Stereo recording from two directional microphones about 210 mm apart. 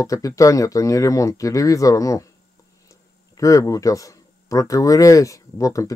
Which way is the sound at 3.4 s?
15° left (ahead or behind).